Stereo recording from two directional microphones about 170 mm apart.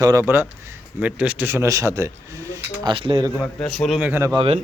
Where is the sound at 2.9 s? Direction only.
25° right (ahead or behind).